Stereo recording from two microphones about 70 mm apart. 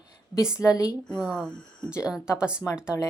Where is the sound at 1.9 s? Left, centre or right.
Centre.